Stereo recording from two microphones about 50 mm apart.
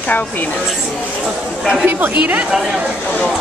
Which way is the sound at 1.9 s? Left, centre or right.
Right.